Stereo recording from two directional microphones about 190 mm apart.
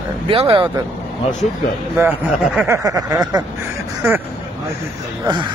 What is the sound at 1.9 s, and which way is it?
Speech, 10° right (ahead or behind).